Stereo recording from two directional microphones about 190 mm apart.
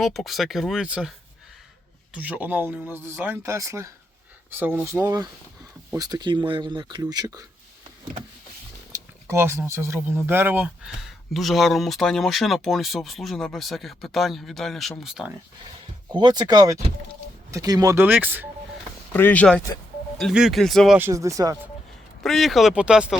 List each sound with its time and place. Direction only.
0.0 s speech: centre (ahead or behind)
2.1 s speech: 10° right (ahead or behind)
8.9 s speech: 10° right (ahead or behind)
16.1 s speech: 20° right (ahead or behind)
19.1 s speech: 10° left (ahead or behind)
21.0 s speech: 15° right (ahead or behind)
22.2 s speech: centre (ahead or behind)